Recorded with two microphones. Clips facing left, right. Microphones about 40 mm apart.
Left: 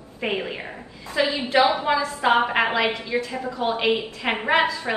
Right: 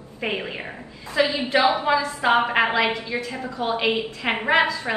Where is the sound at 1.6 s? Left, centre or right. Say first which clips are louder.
Left 1 dB; right.